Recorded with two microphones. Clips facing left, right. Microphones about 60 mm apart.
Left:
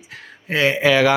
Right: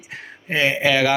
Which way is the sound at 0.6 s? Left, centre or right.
Centre.